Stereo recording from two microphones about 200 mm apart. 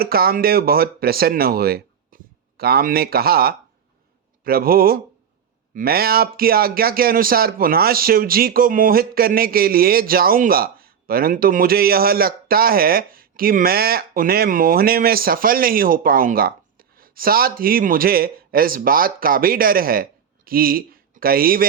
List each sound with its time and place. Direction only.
0.0 s speech: 50° right (ahead or behind)